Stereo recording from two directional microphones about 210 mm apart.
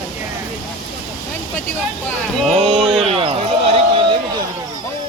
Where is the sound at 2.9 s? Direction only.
30° right (ahead or behind).